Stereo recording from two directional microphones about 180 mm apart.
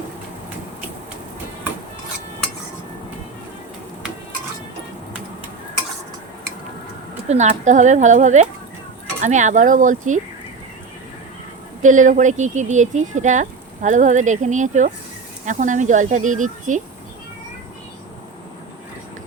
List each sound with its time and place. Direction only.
7.3 s speech: 40° right (ahead or behind)
11.8 s speech: 45° right (ahead or behind)